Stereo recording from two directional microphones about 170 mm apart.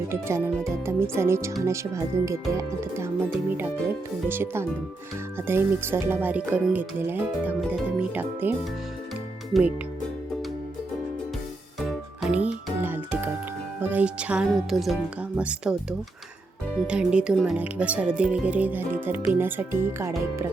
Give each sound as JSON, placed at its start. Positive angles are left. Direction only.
{"t": 0.1, "sound": "speech", "side_deg": -15}
{"t": 11.8, "sound": "music", "side_deg": -5}
{"t": 13.9, "sound": "speech", "side_deg": -5}